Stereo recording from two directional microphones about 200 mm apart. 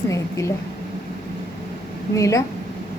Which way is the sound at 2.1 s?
15° left (ahead or behind).